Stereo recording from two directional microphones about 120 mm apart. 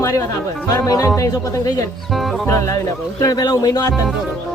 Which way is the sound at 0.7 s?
25° left (ahead or behind).